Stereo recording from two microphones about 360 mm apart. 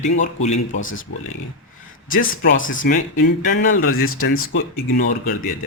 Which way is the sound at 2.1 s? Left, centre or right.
Left.